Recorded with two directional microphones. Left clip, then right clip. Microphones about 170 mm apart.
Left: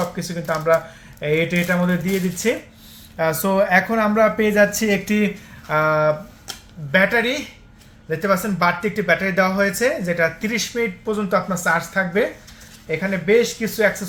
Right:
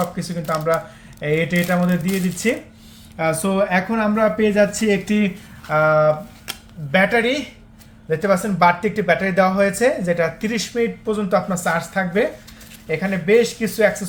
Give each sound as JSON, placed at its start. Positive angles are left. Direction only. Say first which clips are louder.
{"t": 0.2, "sound": "speech", "louder": "even", "side_deg": 10}
{"t": 6.5, "sound": "speech", "louder": "left 1 dB", "side_deg": -5}